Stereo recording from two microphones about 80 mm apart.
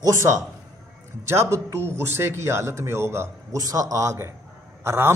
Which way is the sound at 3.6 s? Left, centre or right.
Right.